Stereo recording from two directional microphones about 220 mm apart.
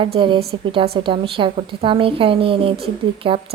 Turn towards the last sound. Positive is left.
turn(degrees=-25)  # may be behind; listen again after turning